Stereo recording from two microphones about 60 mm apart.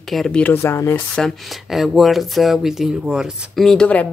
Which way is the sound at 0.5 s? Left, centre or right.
Left.